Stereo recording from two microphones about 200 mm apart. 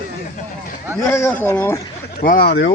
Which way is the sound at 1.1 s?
15° left (ahead or behind).